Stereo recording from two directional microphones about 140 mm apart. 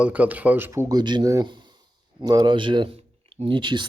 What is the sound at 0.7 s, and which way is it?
Speech, 25° right (ahead or behind).